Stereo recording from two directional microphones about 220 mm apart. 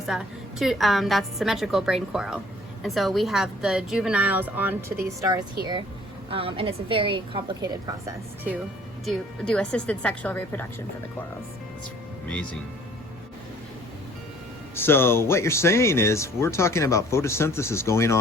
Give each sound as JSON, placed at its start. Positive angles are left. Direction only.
{"t": 0.1, "sound": "a woman's voice", "side_deg": 0}
{"t": 6.3, "sound": "a woman's voice", "side_deg": -25}
{"t": 9.0, "sound": "a woman's voice", "side_deg": 5}
{"t": 14.8, "sound": "speech", "side_deg": 10}